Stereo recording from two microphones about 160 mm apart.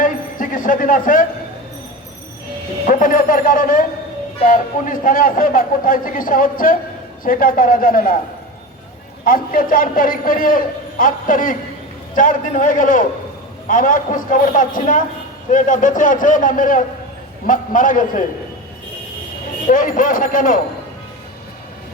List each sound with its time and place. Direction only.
0.0 s a sound: 55° left (ahead or behind)
2.8 s a man's voice: 55° left (ahead or behind)
9.2 s a man's voice: 60° left (ahead or behind)
19.6 s a man's voice: 60° left (ahead or behind)